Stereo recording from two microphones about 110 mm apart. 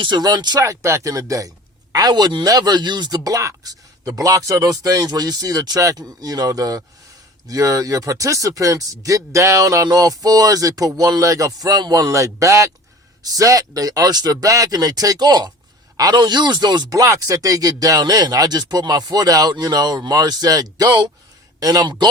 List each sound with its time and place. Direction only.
0.0 s speech: 40° right (ahead or behind)
0.6 s speech: 25° right (ahead or behind)